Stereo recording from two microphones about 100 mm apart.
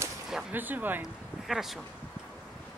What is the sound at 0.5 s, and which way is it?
Speech, 20° right (ahead or behind).